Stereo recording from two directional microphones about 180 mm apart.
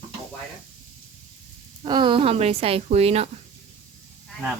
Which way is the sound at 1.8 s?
25° right (ahead or behind).